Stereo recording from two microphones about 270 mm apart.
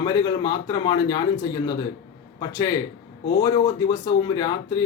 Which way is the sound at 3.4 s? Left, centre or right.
Centre.